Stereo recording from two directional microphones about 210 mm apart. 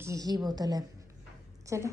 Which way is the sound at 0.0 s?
15° right (ahead or behind).